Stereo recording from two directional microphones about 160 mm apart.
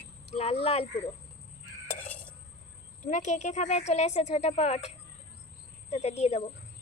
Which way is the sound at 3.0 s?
50° left (ahead or behind).